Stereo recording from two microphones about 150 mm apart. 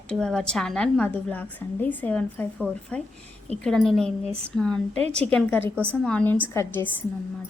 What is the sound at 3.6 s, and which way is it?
A woman's voice, centre (ahead or behind).